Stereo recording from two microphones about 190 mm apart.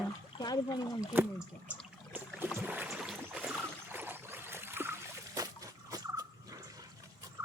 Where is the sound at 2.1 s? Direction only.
10° right (ahead or behind).